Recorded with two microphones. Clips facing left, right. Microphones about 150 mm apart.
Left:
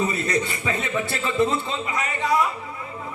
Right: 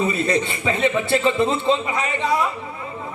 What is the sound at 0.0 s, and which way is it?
A man's voice, 25° right (ahead or behind).